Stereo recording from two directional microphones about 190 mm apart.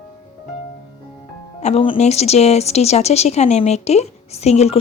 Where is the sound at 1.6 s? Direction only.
30° left (ahead or behind).